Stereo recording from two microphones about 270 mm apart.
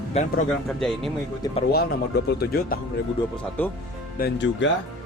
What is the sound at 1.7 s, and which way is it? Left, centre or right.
Speech, left.